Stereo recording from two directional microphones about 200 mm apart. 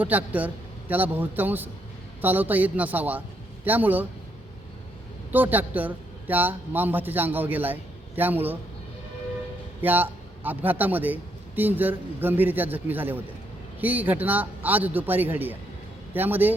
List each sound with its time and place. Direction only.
0.0 s a man's voice: 10° right (ahead or behind)
5.3 s a man's voice: 10° right (ahead or behind)
9.8 s a man's voice: 10° right (ahead or behind)